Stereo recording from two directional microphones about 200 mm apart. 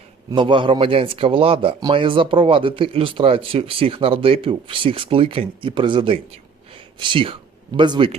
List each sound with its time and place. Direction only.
0.3 s speech: 25° right (ahead or behind)